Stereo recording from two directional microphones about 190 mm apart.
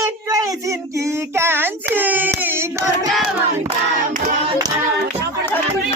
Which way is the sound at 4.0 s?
45° right (ahead or behind).